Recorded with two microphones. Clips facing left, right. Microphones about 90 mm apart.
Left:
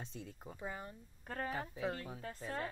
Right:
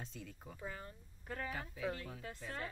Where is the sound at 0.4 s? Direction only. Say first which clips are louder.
Left 3 dB; 20° left (ahead or behind).